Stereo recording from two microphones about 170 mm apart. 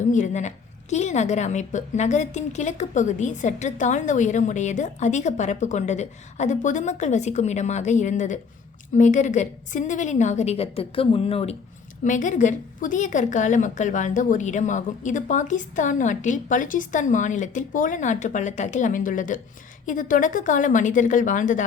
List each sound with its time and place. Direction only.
0.1 s a woman's voice: 45° left (ahead or behind)
12.0 s a woman's voice: 45° left (ahead or behind)